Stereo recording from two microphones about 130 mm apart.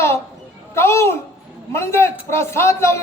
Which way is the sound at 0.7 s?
20° left (ahead or behind).